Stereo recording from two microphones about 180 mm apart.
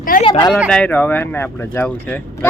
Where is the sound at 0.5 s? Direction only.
Centre (ahead or behind).